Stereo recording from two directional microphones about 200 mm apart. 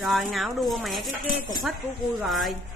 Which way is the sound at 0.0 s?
Centre (ahead or behind).